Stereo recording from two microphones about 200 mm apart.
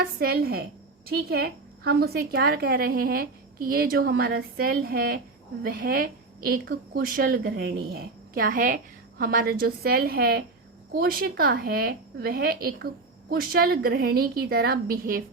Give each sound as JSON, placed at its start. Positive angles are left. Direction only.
{"t": 0.0, "sound": "a woman's voice", "side_deg": -50}